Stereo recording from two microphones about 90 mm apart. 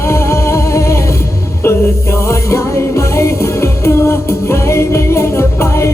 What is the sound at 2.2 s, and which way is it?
Music, 30° left (ahead or behind).